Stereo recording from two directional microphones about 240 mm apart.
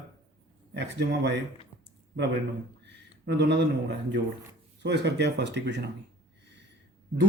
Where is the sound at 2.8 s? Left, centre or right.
Right.